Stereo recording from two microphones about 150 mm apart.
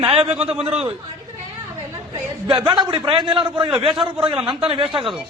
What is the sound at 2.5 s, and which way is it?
A man's voice, 30° right (ahead or behind).